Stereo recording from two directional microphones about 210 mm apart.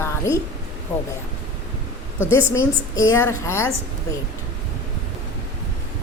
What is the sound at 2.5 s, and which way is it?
A woman's voice, 15° left (ahead or behind).